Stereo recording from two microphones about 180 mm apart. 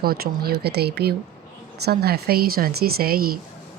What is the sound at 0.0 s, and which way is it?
Speech, 55° right (ahead or behind).